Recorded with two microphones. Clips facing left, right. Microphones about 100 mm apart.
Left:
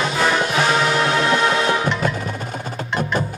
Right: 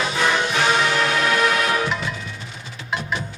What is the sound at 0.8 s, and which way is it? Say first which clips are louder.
Music: left 2 dB; 25° left (ahead or behind).